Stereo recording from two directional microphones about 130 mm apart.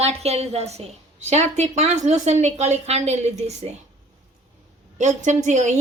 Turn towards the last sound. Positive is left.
turn(degrees=-65)  # may be behind; listen again after turning